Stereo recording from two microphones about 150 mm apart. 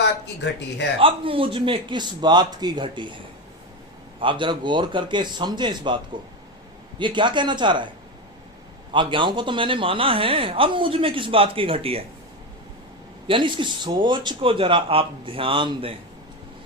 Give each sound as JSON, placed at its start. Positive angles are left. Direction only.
{"t": 0.9, "sound": "speech", "side_deg": -35}
{"t": 4.2, "sound": "speech", "side_deg": -35}
{"t": 7.0, "sound": "speech", "side_deg": -30}
{"t": 8.9, "sound": "speech", "side_deg": -35}
{"t": 13.2, "sound": "speech", "side_deg": -35}